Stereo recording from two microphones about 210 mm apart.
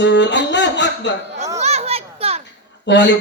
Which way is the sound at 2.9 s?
55° left (ahead or behind).